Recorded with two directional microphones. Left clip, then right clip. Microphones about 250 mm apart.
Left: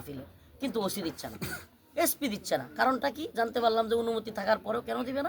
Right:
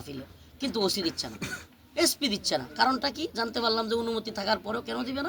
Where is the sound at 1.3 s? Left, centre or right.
Left.